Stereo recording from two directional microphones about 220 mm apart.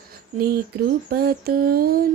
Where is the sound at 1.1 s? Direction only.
45° right (ahead or behind).